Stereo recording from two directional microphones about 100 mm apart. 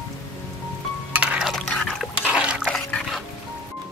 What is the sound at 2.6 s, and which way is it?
Liquid, 5° left (ahead or behind).